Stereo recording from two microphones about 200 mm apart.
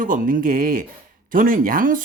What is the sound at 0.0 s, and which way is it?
Speech, 45° right (ahead or behind).